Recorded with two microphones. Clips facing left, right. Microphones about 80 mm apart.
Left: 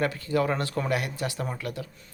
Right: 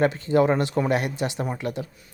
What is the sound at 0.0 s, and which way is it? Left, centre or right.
Speech, right.